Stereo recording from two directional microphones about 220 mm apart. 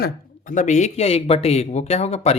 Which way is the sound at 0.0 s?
35° left (ahead or behind).